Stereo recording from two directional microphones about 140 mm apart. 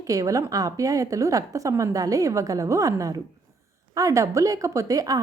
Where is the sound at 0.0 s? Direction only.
25° right (ahead or behind).